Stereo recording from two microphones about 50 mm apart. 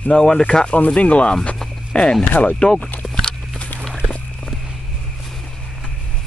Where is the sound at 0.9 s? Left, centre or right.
Left.